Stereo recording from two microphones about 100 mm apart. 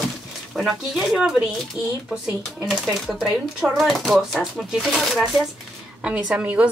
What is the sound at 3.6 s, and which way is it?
Speech, centre (ahead or behind).